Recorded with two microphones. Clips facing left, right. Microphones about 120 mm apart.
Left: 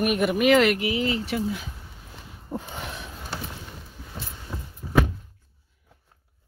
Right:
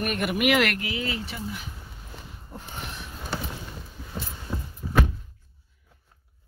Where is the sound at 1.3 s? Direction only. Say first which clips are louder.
Left 8 dB; 75° left (ahead or behind).